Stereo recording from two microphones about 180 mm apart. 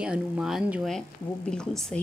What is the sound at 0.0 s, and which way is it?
Speech, 5° right (ahead or behind).